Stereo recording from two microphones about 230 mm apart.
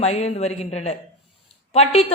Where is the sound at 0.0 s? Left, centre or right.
Left.